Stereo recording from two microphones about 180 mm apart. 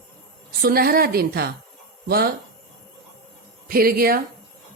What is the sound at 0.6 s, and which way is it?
A woman's voice, 55° right (ahead or behind).